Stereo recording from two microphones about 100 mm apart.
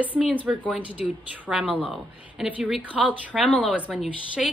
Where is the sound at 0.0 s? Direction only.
15° right (ahead or behind).